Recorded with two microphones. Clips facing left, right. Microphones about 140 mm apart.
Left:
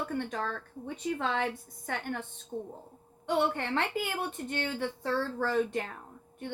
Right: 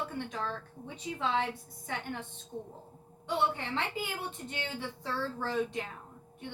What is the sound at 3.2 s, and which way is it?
A woman's voice, 55° left (ahead or behind).